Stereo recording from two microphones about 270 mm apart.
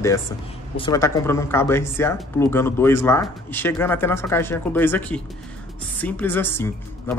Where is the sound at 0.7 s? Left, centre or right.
Centre.